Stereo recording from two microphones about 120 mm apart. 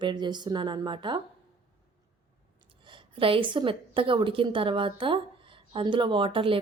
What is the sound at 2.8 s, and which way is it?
Speech, 45° right (ahead or behind).